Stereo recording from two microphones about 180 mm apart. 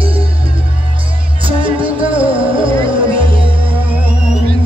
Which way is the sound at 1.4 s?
30° right (ahead or behind).